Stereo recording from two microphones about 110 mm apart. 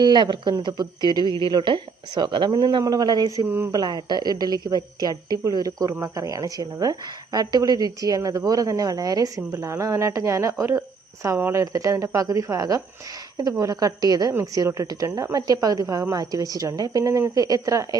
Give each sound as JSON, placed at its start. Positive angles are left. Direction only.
{"t": 0.0, "sound": "a woman's voice", "side_deg": -45}
{"t": 3.4, "sound": "speech", "side_deg": -25}
{"t": 3.8, "sound": "a woman's voice", "side_deg": -40}